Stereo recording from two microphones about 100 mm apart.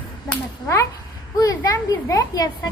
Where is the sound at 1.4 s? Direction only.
35° left (ahead or behind).